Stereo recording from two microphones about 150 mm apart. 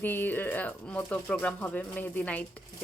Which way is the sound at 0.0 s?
10° left (ahead or behind).